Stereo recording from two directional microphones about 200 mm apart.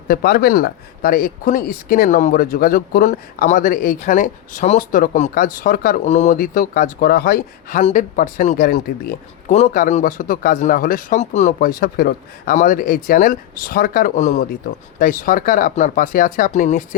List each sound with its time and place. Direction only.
0.1 s speech: 50° left (ahead or behind)